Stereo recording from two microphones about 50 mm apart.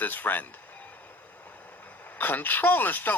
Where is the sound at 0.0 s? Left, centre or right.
Left.